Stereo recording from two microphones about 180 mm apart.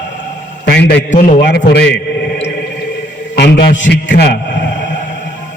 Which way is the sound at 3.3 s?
65° left (ahead or behind).